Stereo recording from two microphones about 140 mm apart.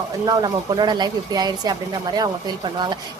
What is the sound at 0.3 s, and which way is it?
Speech, 30° right (ahead or behind).